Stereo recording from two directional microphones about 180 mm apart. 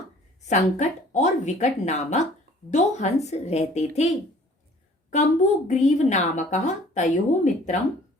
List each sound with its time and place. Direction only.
0.4 s a woman's voice: 40° left (ahead or behind)
5.1 s a woman's voice: 40° left (ahead or behind)